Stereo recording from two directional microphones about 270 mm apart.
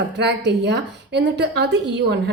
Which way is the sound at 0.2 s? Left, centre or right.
Right.